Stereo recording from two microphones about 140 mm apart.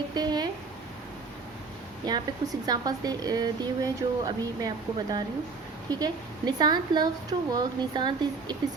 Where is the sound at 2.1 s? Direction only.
30° right (ahead or behind).